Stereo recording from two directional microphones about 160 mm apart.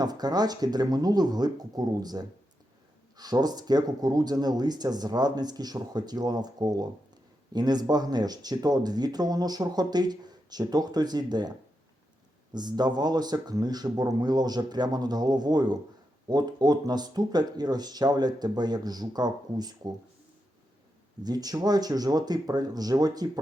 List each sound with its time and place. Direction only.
0.0 s speech: 25° right (ahead or behind)
12.5 s speech: 25° right (ahead or behind)
21.2 s speech: 25° right (ahead or behind)